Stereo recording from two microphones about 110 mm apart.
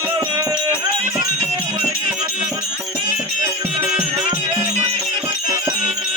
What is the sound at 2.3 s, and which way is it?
Music, 10° right (ahead or behind).